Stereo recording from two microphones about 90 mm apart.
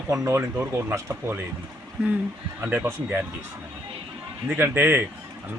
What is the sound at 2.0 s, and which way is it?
Speech, 5° right (ahead or behind).